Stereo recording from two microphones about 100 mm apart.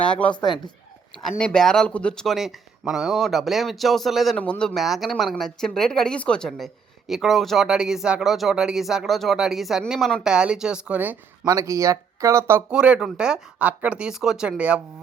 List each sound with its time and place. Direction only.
0.1 s speech: 10° left (ahead or behind)
4.4 s speech: 10° left (ahead or behind); by 11.2 s 15° right (ahead or behind)
11.4 s speech: 35° right (ahead or behind)
12.7 s speech: 10° right (ahead or behind)